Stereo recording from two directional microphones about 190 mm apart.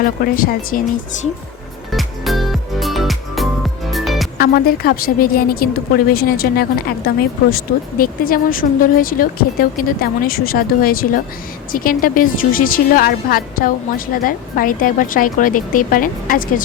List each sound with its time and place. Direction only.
0.0 s a woman's voice: 50° left (ahead or behind)
1.9 s music: centre (ahead or behind)
4.4 s a woman's voice: 50° left (ahead or behind)